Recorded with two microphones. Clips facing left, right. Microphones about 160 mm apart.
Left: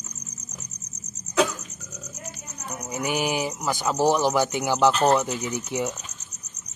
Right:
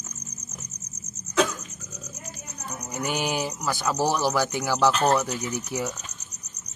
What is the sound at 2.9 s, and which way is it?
Speech, 10° left (ahead or behind).